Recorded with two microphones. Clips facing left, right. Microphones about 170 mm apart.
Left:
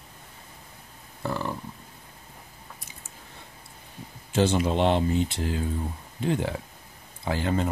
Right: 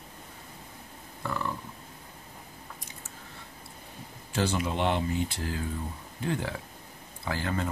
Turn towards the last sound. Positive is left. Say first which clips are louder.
# left 5 dB
turn(degrees=20)  # may be behind; listen again after turning